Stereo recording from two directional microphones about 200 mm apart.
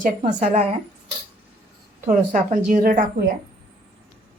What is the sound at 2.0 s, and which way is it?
A woman's voice, 40° right (ahead or behind).